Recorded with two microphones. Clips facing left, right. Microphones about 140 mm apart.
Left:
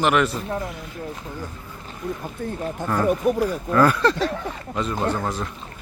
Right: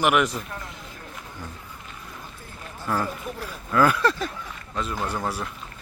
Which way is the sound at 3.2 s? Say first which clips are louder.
Left 14 dB; 75° left (ahead or behind).